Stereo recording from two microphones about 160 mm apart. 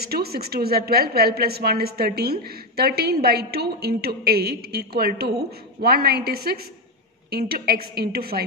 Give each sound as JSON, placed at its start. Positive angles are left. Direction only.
{"t": 0.0, "sound": "a woman's voice", "side_deg": -75}